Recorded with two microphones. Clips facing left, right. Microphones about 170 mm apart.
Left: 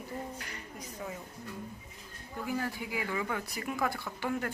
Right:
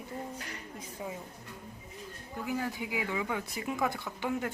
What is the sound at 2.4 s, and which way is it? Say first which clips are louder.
Speech: right 1 dB; 15° right (ahead or behind).